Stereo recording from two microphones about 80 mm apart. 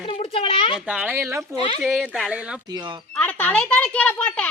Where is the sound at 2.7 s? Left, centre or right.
Right.